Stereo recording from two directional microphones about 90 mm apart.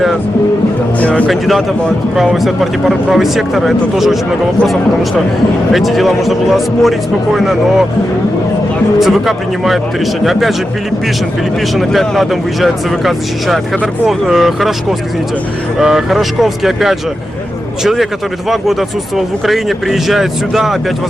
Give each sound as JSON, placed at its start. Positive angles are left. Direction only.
{"t": 0.9, "sound": "speech", "side_deg": 15}
{"t": 1.3, "sound": "speech", "side_deg": 0}
{"t": 5.7, "sound": "speech", "side_deg": 0}
{"t": 9.0, "sound": "speech", "side_deg": 0}
{"t": 11.8, "sound": "speech", "side_deg": 0}